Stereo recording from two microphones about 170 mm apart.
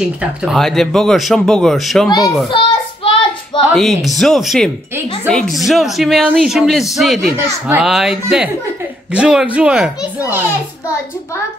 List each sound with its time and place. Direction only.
0.2 s speech: 5° right (ahead or behind)
2.5 s child singing: 30° left (ahead or behind)
3.7 s speech: centre (ahead or behind)
7.3 s a child's voice: 10° right (ahead or behind)